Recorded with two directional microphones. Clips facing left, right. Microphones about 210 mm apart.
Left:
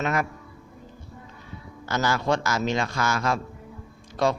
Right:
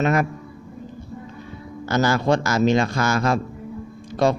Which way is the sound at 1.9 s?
40° right (ahead or behind).